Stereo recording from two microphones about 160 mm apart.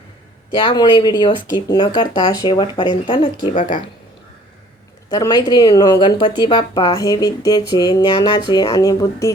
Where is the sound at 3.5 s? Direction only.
55° left (ahead or behind).